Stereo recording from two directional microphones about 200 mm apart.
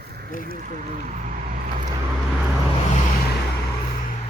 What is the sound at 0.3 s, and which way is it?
Speech, 40° left (ahead or behind).